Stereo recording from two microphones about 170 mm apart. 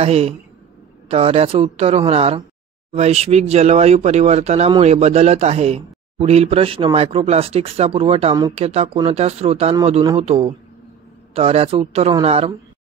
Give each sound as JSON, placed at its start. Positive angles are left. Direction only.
{"t": 0.0, "sound": "speech", "side_deg": -35}